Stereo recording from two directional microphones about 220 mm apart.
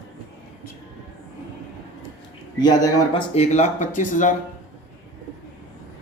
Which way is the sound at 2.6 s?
20° left (ahead or behind).